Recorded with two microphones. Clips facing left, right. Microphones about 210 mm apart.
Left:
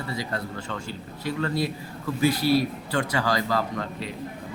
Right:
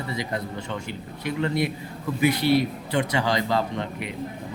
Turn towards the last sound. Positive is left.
turn(degrees=-20)  # may be behind; listen again after turning